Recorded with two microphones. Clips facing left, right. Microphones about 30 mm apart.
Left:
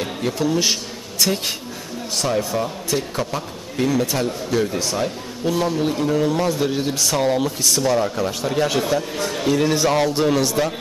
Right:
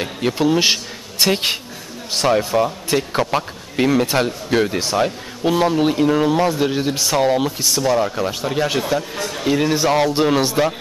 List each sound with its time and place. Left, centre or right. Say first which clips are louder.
0.0 s a man's voice: right 3 dB; right
10.1 s a man's voice: right 2 dB; right